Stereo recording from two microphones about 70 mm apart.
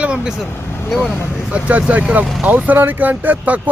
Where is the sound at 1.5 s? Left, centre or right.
Right.